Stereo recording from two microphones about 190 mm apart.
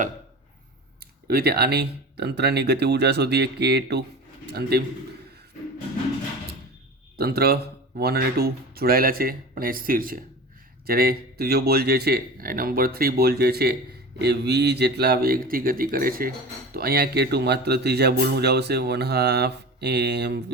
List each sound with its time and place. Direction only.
1.3 s a man's voice: 55° right (ahead or behind)
7.2 s speech: 55° right (ahead or behind)